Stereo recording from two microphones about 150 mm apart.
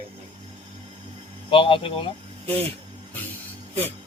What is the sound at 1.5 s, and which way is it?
Speech, 35° left (ahead or behind).